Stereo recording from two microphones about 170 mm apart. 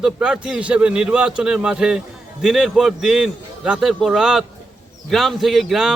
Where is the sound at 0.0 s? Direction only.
5° right (ahead or behind).